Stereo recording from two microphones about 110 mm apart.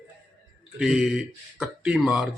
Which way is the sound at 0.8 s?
Centre (ahead or behind).